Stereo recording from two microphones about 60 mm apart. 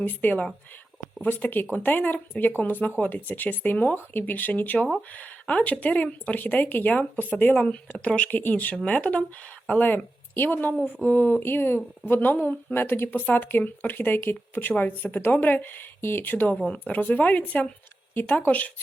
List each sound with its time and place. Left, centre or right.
0.0 s speech: left
7.6 s speech: centre; by 16.6 s left
16.6 s speech: left